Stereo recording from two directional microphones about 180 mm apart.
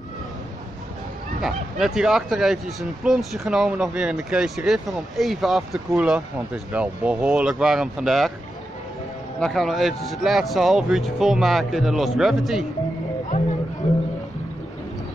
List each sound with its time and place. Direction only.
1.4 s speech: centre (ahead or behind)
9.4 s speech: centre (ahead or behind)
13.8 s music: 35° left (ahead or behind)